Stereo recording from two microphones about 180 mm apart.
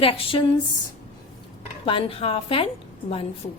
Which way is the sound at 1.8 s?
30° left (ahead or behind).